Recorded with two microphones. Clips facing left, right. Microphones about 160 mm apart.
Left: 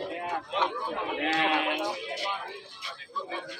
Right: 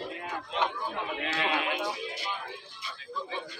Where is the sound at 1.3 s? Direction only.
50° left (ahead or behind).